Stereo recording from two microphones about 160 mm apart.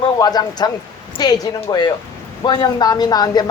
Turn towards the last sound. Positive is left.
turn(degrees=25)  # may be behind; listen again after turning